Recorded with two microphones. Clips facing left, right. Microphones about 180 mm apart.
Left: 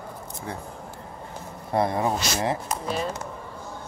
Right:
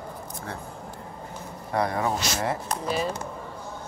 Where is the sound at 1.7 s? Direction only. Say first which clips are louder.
Left 2 dB; 25° left (ahead or behind).